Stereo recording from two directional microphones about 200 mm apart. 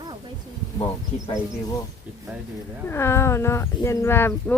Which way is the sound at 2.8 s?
10° left (ahead or behind).